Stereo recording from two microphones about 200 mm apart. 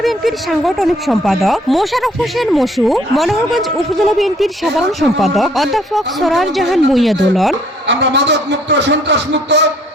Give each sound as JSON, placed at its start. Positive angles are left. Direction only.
{"t": 0.0, "sound": "speech", "side_deg": 0}
{"t": 7.9, "sound": "a man's voice", "side_deg": -60}